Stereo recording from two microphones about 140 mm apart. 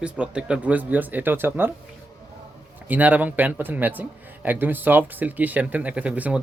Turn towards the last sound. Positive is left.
turn(degrees=-10)  # may be behind; listen again after turning